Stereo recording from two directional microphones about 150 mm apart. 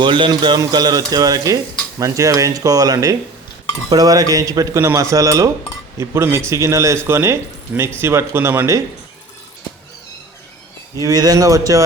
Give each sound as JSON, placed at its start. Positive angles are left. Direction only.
{"t": 0.0, "sound": "speech", "side_deg": -30}
{"t": 11.0, "sound": "speech", "side_deg": -25}